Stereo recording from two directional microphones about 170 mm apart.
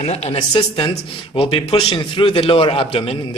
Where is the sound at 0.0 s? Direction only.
40° left (ahead or behind).